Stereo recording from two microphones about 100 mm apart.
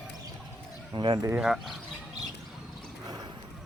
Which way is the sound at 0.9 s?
55° right (ahead or behind).